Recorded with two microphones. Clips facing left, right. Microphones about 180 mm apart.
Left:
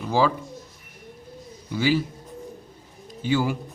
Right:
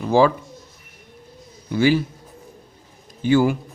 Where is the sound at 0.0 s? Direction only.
50° right (ahead or behind).